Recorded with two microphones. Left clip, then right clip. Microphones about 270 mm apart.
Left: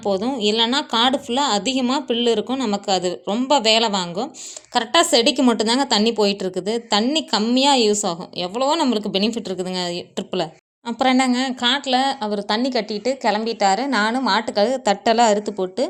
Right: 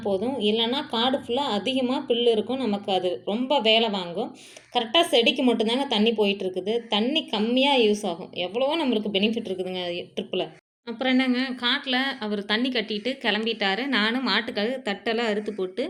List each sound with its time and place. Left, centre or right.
0.0 s a woman's voice: left
4.7 s speech: left
10.8 s speech: left